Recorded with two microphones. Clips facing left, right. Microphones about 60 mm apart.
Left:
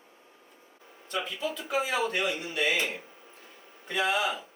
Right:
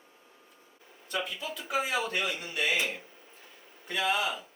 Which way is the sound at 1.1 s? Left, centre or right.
Centre.